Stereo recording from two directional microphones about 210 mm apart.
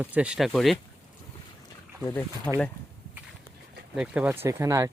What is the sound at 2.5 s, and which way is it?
Speech, 10° left (ahead or behind).